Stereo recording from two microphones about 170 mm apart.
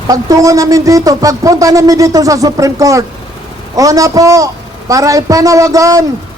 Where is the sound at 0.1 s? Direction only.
20° right (ahead or behind).